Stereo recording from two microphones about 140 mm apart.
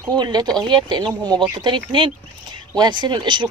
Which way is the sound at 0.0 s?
30° right (ahead or behind).